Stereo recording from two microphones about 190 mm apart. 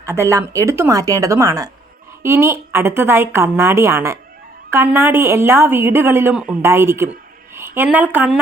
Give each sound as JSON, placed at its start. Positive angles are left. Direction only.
{"t": 0.0, "sound": "a woman's voice", "side_deg": -15}